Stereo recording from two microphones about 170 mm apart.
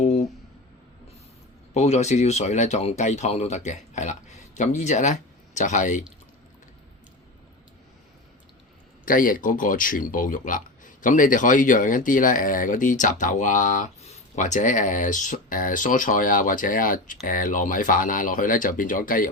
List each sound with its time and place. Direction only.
1.7 s speech: 40° left (ahead or behind)
9.0 s speech: 55° left (ahead or behind)